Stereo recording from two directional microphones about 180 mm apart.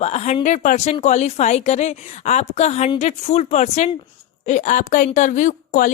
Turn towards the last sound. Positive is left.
turn(degrees=45)  # may be behind; listen again after turning